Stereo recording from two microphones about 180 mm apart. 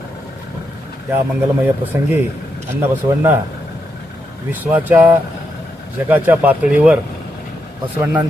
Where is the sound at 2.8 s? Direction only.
10° right (ahead or behind).